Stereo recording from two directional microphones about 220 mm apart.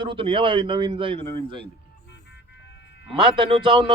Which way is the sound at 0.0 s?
20° right (ahead or behind).